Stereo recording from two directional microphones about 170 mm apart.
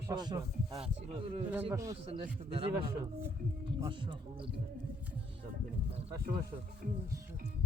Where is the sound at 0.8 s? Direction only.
35° right (ahead or behind).